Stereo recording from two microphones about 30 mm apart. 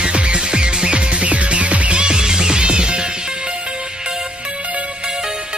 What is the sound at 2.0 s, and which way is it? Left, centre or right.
Music, right.